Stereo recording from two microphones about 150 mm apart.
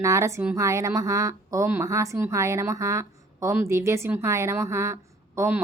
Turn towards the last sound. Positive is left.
turn(degrees=-15)  # may be behind; listen again after turning